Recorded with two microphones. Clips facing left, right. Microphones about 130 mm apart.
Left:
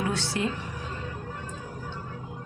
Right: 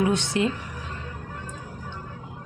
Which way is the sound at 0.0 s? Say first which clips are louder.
Right 5 dB; 20° right (ahead or behind).